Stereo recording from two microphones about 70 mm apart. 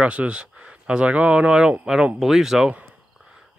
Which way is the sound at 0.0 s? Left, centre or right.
Centre.